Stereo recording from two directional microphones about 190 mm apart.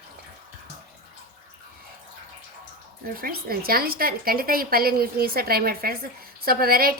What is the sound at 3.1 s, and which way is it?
A woman's voice, 50° right (ahead or behind).